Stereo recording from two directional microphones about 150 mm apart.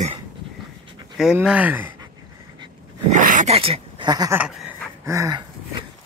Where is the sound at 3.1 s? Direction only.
60° right (ahead or behind).